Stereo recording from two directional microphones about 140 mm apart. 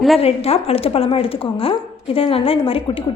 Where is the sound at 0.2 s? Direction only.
45° left (ahead or behind).